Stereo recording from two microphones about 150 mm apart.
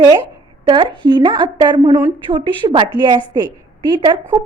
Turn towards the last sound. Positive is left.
turn(degrees=-30)  # may be behind; listen again after turning